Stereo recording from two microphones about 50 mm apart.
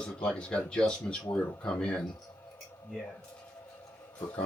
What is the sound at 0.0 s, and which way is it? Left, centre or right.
Speech, centre.